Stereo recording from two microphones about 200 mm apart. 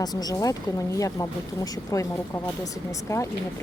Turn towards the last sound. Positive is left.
turn(degrees=15)  # may be behind; listen again after turning